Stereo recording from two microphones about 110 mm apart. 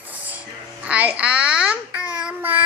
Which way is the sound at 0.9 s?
10° right (ahead or behind).